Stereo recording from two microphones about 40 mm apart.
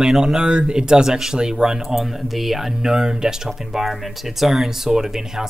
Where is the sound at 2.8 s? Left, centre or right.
Centre.